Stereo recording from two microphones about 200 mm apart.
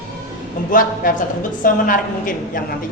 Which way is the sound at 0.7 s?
45° left (ahead or behind).